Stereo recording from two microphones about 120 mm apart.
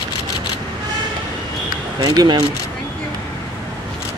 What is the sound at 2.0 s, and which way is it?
Speech, 35° right (ahead or behind).